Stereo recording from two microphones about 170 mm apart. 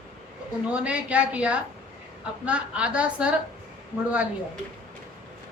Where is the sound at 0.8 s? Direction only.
5° right (ahead or behind).